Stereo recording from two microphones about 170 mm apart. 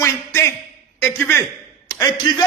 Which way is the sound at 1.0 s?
15° left (ahead or behind).